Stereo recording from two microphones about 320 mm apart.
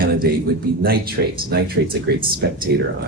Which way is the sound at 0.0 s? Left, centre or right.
Right.